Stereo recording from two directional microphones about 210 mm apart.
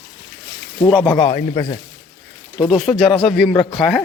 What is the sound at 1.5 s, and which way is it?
Speech, 25° left (ahead or behind).